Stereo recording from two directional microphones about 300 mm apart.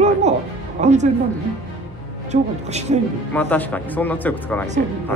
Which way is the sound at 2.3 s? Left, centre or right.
Right.